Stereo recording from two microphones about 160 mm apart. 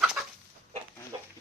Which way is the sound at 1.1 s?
25° right (ahead or behind).